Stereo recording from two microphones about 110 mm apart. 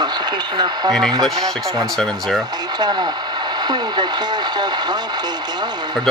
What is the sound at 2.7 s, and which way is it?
Speech, 40° right (ahead or behind).